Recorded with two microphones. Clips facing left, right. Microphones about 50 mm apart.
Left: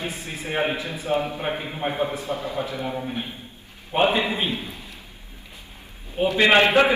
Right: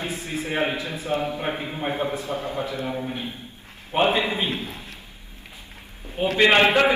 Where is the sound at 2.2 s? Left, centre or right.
Right.